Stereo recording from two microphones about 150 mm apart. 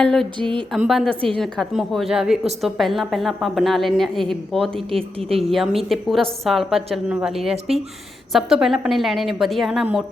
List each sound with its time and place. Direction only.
0.0 s a woman's voice: 5° left (ahead or behind)
4.9 s speech: 40° right (ahead or behind)
5.4 s a woman's voice: centre (ahead or behind)